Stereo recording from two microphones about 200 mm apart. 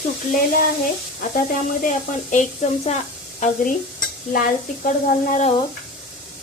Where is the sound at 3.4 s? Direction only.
40° left (ahead or behind).